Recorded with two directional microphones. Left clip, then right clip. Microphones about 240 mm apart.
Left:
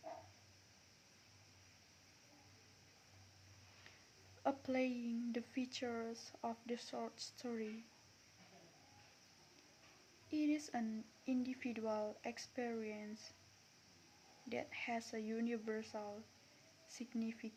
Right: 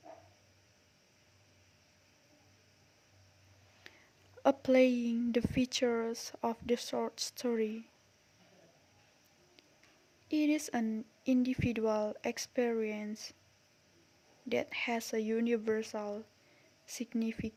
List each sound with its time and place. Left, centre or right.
4.4 s speech: right
10.2 s speech: right
14.5 s speech: right